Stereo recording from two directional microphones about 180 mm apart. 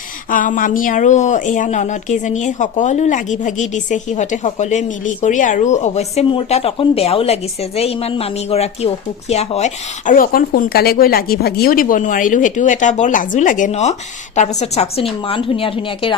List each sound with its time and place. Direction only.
0.3 s a woman's voice: 50° left (ahead or behind); by 16.1 s 30° left (ahead or behind)